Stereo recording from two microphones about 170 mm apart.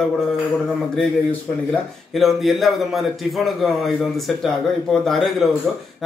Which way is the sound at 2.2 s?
Centre (ahead or behind).